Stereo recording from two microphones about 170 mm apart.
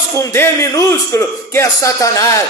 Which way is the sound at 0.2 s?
15° left (ahead or behind).